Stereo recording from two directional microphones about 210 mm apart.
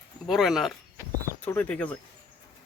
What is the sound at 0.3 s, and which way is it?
Speech, centre (ahead or behind).